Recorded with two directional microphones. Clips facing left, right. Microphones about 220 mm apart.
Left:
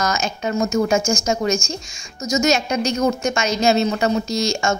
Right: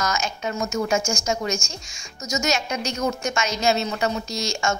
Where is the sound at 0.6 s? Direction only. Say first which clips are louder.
Left 6 dB; 45° left (ahead or behind).